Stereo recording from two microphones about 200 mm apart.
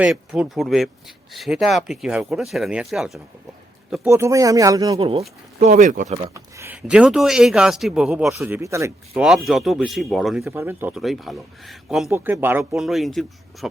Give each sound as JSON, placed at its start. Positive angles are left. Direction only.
{"t": 0.0, "sound": "speech", "side_deg": -5}
{"t": 4.9, "sound": "speech", "side_deg": -30}
{"t": 6.2, "sound": "speech", "side_deg": -15}
{"t": 9.5, "sound": "speech", "side_deg": 0}
{"t": 10.4, "sound": "speech", "side_deg": -10}